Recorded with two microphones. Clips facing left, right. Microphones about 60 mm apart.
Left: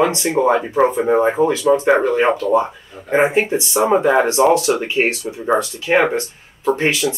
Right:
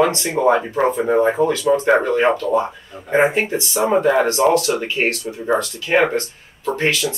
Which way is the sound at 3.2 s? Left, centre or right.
Centre.